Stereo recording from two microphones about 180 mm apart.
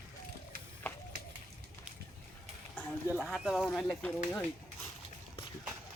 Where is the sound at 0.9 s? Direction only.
10° left (ahead or behind).